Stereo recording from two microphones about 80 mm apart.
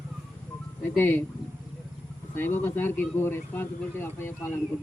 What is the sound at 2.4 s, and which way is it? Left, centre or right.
Speech, left.